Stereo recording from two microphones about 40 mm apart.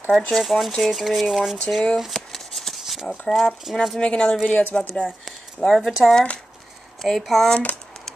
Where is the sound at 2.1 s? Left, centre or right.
Centre.